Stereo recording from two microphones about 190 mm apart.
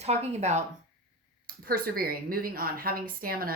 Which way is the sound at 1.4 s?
50° right (ahead or behind).